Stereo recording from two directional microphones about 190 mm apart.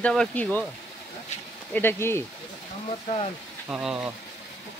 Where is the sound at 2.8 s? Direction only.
30° left (ahead or behind).